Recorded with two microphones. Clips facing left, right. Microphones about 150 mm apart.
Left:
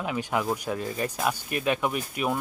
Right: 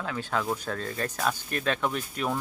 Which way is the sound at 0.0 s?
15° left (ahead or behind).